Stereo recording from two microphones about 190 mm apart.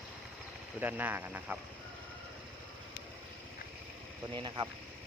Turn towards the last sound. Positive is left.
turn(degrees=-25)  # may be behind; listen again after turning